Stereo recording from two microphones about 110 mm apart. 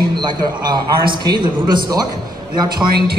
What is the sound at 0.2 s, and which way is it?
A man's voice, 40° right (ahead or behind).